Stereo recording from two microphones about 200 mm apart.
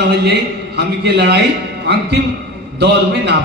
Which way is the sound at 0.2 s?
55° right (ahead or behind).